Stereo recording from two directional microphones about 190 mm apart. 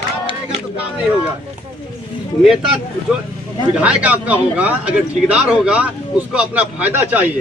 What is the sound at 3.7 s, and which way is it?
A man's voice, 5° right (ahead or behind).